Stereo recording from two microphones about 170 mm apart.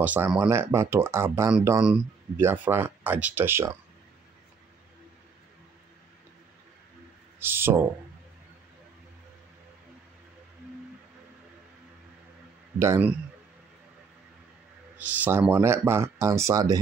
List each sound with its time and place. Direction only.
0.0 s speech: 10° right (ahead or behind)
7.3 s a sound: 15° right (ahead or behind)
12.7 s speech: 15° right (ahead or behind)
15.0 s speech: 10° right (ahead or behind)